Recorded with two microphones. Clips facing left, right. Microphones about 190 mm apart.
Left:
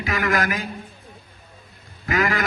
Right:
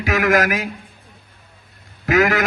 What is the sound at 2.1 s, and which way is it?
Speech, 90° right.